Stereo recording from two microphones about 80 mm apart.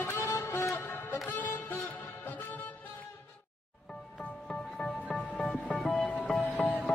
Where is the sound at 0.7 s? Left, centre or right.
Left.